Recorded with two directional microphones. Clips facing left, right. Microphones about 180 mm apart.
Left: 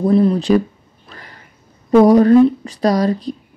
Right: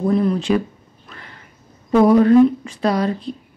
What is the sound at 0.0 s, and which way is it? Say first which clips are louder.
Speech: left 4 dB; 35° left (ahead or behind).